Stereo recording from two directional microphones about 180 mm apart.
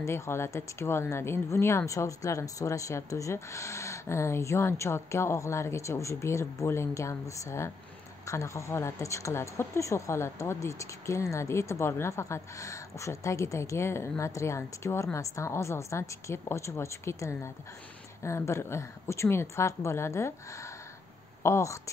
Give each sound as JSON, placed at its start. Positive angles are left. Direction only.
{"t": 0.0, "sound": "a woman's voice", "side_deg": 15}